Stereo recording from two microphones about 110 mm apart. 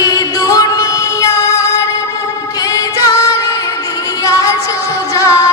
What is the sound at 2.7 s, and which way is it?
Music, 30° left (ahead or behind).